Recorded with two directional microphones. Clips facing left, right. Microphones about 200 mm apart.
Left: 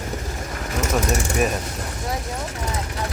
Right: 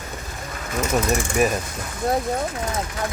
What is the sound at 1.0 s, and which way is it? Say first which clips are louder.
Mechanisms: right 1 dB; 45° left (ahead or behind).